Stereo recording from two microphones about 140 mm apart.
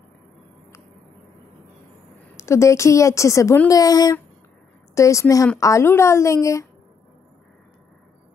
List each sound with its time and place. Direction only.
2.3 s speech: 20° left (ahead or behind)